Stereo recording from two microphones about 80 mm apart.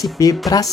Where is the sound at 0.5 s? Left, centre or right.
Left.